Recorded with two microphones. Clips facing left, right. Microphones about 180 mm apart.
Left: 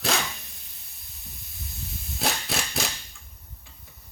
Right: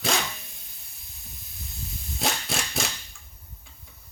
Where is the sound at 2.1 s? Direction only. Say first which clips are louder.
Even; centre (ahead or behind).